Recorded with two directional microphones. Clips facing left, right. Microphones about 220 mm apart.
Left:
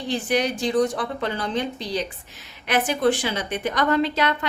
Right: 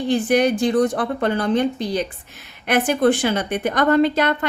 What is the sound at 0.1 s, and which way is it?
A woman's voice, 55° right (ahead or behind).